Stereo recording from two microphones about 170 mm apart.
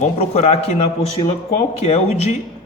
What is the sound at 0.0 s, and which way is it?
Speech, 40° left (ahead or behind).